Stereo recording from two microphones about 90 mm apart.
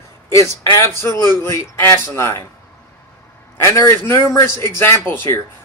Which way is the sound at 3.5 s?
35° left (ahead or behind).